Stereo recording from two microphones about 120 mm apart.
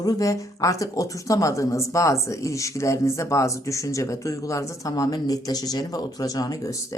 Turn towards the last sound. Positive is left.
turn(degrees=30)  # may be behind; listen again after turning